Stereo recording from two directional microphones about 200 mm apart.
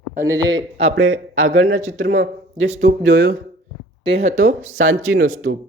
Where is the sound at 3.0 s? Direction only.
65° right (ahead or behind).